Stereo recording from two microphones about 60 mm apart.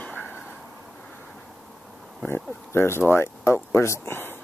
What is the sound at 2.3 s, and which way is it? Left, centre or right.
Speech, left.